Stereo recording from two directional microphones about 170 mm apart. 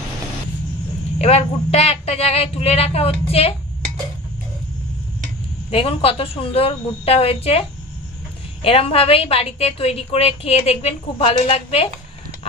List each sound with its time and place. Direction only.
1.1 s a woman's voice: 40° left (ahead or behind)
5.7 s a woman's voice: 35° left (ahead or behind)
8.6 s a woman's voice: 35° left (ahead or behind)